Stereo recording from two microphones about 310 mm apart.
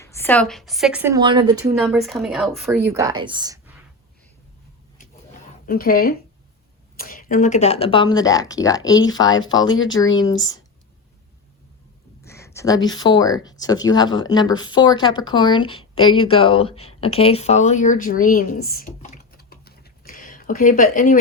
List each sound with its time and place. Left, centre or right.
0.0 s speech: centre
1.8 s speech: centre
5.6 s speech: left; by 9.6 s centre
9.6 s speech: left
9.9 s speech: centre
12.2 s a sound: centre
13.0 s speech: centre